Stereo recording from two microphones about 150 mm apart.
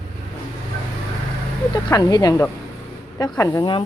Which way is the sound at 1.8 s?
25° left (ahead or behind).